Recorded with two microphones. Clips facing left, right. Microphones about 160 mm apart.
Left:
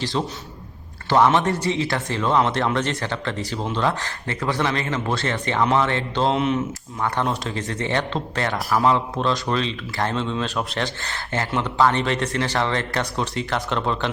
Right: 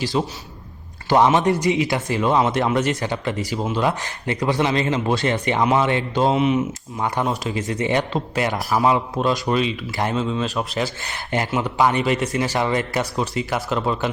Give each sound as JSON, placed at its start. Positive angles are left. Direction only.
{"t": 0.0, "sound": "speech", "side_deg": -10}
{"t": 6.2, "sound": "speech", "side_deg": 0}
{"t": 6.6, "sound": "speech", "side_deg": -15}
{"t": 7.3, "sound": "speech", "side_deg": -5}
{"t": 11.0, "sound": "speech", "side_deg": -15}